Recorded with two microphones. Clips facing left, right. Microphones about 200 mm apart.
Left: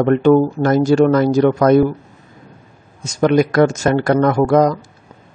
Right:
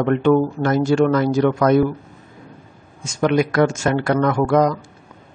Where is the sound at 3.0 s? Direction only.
40° left (ahead or behind).